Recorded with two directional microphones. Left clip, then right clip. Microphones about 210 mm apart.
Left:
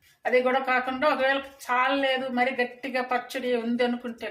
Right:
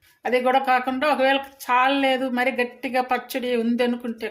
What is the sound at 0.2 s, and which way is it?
Speech, 60° right (ahead or behind).